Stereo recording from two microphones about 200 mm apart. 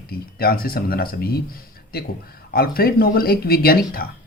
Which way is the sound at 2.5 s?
50° left (ahead or behind).